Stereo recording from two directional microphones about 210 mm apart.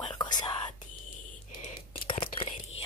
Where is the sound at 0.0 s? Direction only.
20° left (ahead or behind).